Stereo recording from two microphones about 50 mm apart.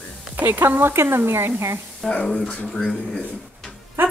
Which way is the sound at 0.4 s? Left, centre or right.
Right.